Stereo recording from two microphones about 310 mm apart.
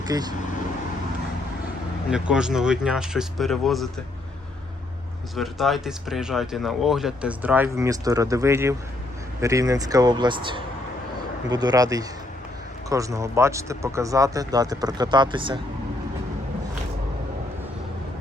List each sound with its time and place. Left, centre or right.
0.0 s speech: centre
2.0 s speech: centre
5.4 s speech: centre